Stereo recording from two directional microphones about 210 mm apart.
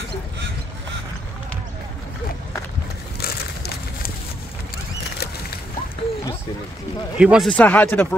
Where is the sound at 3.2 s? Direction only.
45° left (ahead or behind).